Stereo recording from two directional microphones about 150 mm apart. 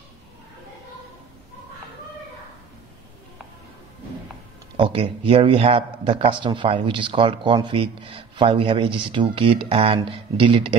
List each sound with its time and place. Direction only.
4.7 s a man's voice: 35° right (ahead or behind)